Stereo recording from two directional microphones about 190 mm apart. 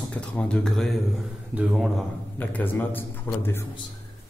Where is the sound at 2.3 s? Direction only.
10° left (ahead or behind).